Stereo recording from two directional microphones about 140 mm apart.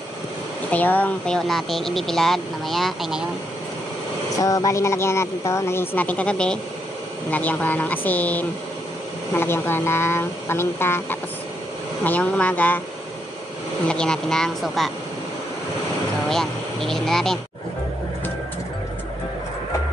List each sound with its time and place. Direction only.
0.7 s speech: 10° left (ahead or behind)
4.4 s a woman's voice: 25° left (ahead or behind)
13.8 s speech: 5° left (ahead or behind)
16.3 s speech: 5° left (ahead or behind)